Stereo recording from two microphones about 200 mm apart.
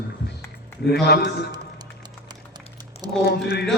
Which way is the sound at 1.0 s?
55° left (ahead or behind).